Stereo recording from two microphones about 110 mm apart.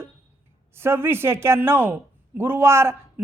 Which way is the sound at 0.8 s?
20° right (ahead or behind).